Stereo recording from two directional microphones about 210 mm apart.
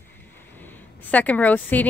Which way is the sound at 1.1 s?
5° left (ahead or behind).